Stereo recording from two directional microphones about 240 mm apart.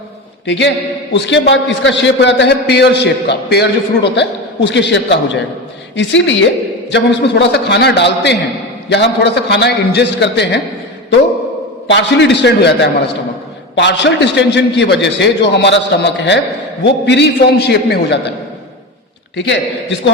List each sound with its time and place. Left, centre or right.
0.4 s a man's voice: left
11.9 s a man's voice: left
19.4 s a man's voice: left